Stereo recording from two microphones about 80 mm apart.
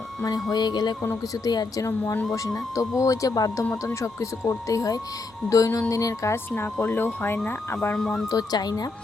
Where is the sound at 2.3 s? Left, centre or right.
Left.